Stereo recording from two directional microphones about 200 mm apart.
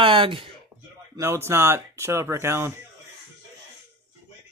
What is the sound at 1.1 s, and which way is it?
Speech, 15° right (ahead or behind).